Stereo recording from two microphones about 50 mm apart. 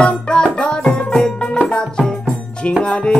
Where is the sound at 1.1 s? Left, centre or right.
Centre.